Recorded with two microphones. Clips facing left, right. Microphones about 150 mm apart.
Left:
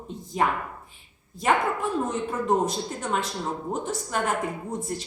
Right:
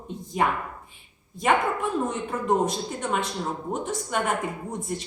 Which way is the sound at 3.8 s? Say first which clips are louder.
Right 1 dB; centre (ahead or behind).